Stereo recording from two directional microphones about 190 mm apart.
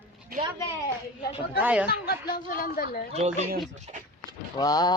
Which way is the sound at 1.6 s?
5° right (ahead or behind).